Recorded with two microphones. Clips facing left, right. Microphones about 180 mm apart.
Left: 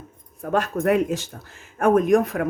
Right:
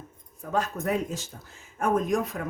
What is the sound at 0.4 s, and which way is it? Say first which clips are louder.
Speech: left 7 dB; 65° left (ahead or behind).